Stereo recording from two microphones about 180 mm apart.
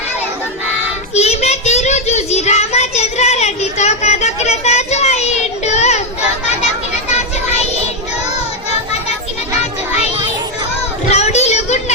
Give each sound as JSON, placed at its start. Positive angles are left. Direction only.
{"t": 1.1, "sound": "child singing", "side_deg": 35}
{"t": 11.1, "sound": "child singing", "side_deg": 35}